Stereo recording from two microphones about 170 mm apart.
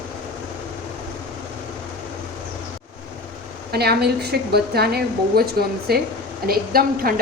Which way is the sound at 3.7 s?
70° right (ahead or behind).